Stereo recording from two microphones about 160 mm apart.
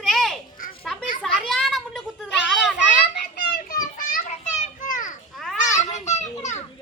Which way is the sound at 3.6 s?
60° left (ahead or behind).